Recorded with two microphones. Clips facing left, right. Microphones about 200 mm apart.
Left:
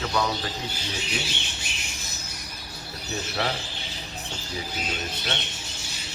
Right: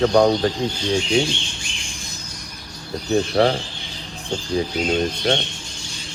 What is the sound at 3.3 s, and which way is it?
Speech, 55° right (ahead or behind).